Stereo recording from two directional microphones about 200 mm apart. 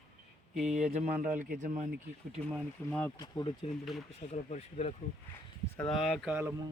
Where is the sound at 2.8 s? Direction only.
10° left (ahead or behind).